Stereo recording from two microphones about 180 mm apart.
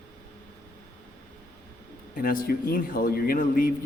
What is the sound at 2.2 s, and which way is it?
A man's voice, 55° left (ahead or behind).